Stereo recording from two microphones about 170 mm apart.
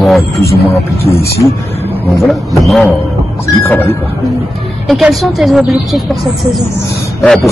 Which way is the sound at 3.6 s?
10° left (ahead or behind).